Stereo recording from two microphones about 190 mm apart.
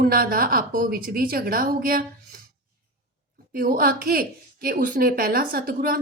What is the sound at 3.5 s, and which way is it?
A woman's voice, 50° right (ahead or behind).